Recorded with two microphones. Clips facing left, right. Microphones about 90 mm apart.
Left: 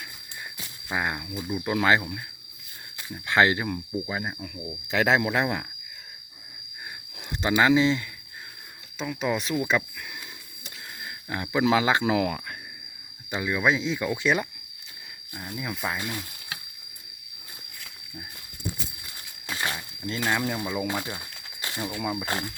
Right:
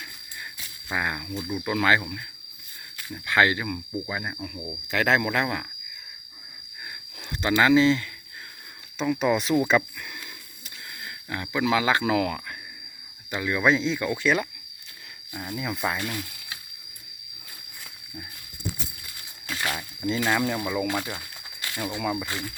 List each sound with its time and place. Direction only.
0.9 s speech: 15° left (ahead or behind)
3.2 s speech: 25° left (ahead or behind)
3.8 s speech: centre (ahead or behind)
4.4 s speech: 5° right (ahead or behind)
4.9 s speech: 20° left (ahead or behind)
7.4 s speech: 15° left (ahead or behind)
9.0 s speech: centre (ahead or behind)
11.3 s speech: 30° left (ahead or behind)
15.3 s speech: 5° right (ahead or behind)
16.0 s speech: 15° left (ahead or behind)
19.5 s a sound: 20° left (ahead or behind)
20.1 s speech: centre (ahead or behind)
20.7 s speech: 15° left (ahead or behind)
21.6 s a sound: 25° left (ahead or behind)